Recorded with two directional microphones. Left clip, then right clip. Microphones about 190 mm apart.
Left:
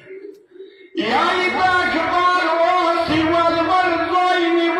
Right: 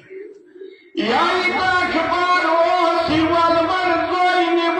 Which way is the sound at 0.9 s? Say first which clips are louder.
Even; 35° left (ahead or behind).